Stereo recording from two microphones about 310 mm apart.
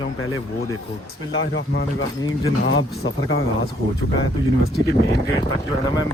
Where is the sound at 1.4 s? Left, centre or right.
Left.